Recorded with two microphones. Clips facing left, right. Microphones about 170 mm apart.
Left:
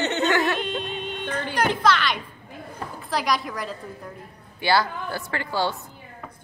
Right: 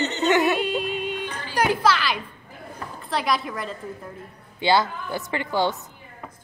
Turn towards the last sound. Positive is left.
turn(degrees=-20)  # may be behind; listen again after turning